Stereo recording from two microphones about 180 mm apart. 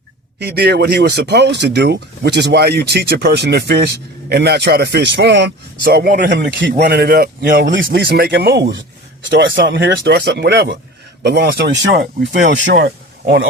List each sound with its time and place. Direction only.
0.3 s speech: 65° right (ahead or behind); by 6.3 s 50° right (ahead or behind)
6.3 s speech: 70° right (ahead or behind)
9.4 s speech: 80° right; by 13.5 s 65° right (ahead or behind)